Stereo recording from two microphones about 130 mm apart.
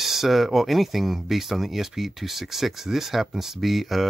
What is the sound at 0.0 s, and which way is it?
Speech, centre (ahead or behind).